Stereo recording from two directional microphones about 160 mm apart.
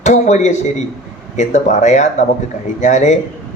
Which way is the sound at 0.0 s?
45° left (ahead or behind).